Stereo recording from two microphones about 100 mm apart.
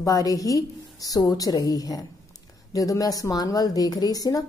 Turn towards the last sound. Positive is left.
turn(degrees=40)  # may be behind; listen again after turning